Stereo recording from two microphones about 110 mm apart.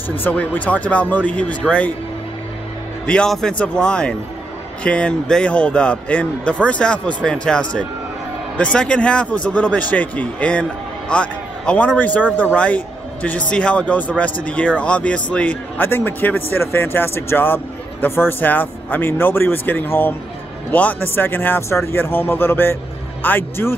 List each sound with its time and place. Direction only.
0.2 s a man's voice: 15° left (ahead or behind)
3.1 s a man's voice: 5° left (ahead or behind)